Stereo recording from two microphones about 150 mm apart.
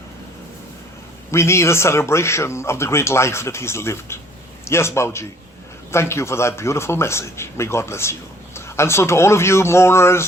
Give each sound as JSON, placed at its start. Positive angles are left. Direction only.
{"t": 1.3, "sound": "speech", "side_deg": 20}